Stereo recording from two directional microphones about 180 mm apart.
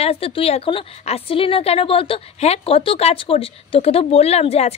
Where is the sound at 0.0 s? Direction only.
35° left (ahead or behind).